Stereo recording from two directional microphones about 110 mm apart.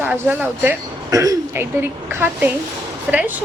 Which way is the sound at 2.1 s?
20° right (ahead or behind).